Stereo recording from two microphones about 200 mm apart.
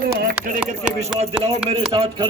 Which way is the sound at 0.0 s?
45° right (ahead or behind).